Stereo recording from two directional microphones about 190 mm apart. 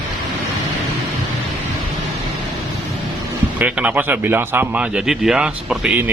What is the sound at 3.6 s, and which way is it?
Speech, 5° right (ahead or behind).